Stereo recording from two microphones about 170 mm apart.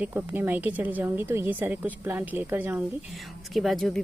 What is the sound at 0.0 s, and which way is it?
Speech, 10° right (ahead or behind).